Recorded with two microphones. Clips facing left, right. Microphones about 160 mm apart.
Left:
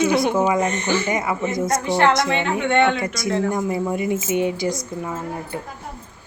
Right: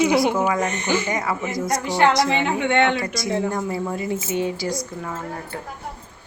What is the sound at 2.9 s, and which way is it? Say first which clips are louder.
Speech: left 1 dB; 20° left (ahead or behind).